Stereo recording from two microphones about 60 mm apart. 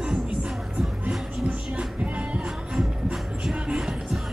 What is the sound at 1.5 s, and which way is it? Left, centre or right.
Music, centre.